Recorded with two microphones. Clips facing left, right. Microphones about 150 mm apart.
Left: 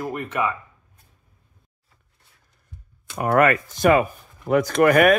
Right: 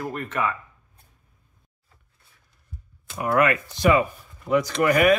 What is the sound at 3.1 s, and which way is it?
Speech, 45° left (ahead or behind).